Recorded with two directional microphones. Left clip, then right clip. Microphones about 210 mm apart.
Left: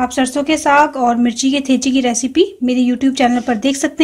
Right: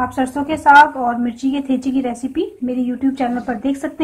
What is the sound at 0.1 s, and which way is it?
Speech, 60° left (ahead or behind).